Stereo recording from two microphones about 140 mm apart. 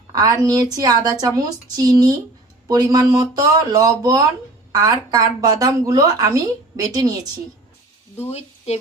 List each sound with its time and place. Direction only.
0.1 s a woman's voice: 25° right (ahead or behind)
8.3 s a woman's voice: 50° left (ahead or behind)